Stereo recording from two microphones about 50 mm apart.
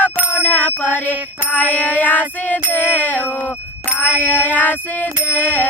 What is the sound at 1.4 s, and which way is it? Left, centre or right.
Music, left.